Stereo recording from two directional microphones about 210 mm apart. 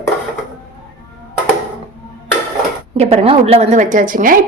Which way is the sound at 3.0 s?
30° right (ahead or behind).